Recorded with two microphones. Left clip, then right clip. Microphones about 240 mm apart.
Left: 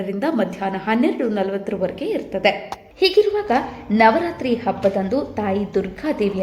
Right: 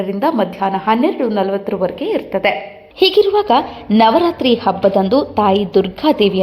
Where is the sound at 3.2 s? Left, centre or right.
Centre.